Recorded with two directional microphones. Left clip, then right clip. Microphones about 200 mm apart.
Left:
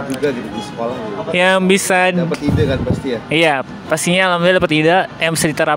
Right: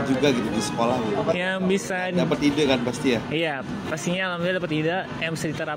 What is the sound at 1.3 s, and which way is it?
Speech, 50° left (ahead or behind).